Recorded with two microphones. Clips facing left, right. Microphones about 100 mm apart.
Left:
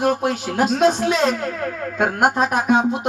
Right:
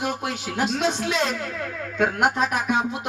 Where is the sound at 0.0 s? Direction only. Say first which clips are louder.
Left 8 dB; 45° left (ahead or behind).